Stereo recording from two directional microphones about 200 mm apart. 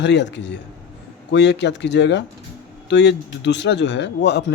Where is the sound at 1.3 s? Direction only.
60° left (ahead or behind).